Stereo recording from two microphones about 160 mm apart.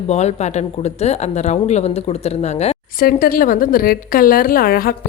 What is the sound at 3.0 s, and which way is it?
A woman's voice, 65° left (ahead or behind).